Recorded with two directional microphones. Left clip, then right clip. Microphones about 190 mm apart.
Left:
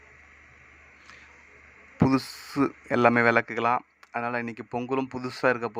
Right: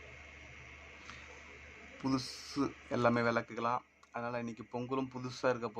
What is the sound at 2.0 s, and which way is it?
Speech, 30° left (ahead or behind).